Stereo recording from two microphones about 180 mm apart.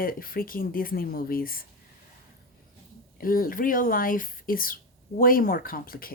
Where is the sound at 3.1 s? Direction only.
55° left (ahead or behind).